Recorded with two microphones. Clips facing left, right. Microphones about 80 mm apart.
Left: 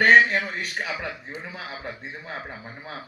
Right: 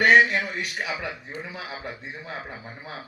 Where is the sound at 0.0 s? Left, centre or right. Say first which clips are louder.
Left 1 dB; left.